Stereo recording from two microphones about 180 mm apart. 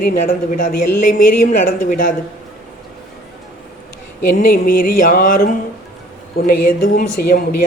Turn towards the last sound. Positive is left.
turn(degrees=55)  # may be behind; listen again after turning